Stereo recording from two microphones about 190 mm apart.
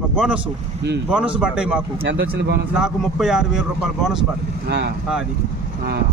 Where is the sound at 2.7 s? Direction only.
5° right (ahead or behind).